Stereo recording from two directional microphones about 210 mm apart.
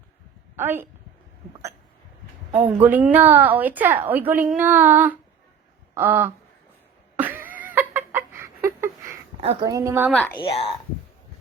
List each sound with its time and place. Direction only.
0.5 s a woman's voice: 10° right (ahead or behind)
2.6 s a woman's voice: 10° right (ahead or behind)
5.9 s a sound: 10° right (ahead or behind)
9.4 s a woman's voice: 25° right (ahead or behind)
10.1 s speech: 5° left (ahead or behind)
10.3 s speech: 25° left (ahead or behind)